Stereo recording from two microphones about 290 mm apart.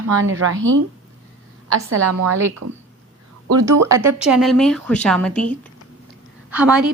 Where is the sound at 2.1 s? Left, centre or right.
Right.